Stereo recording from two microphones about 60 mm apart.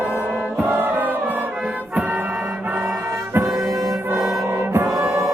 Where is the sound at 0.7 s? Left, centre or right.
Right.